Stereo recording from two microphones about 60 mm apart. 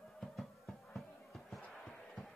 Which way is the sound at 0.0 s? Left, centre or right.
Centre.